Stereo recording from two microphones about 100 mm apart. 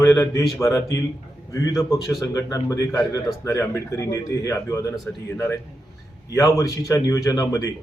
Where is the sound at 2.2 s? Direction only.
35° left (ahead or behind).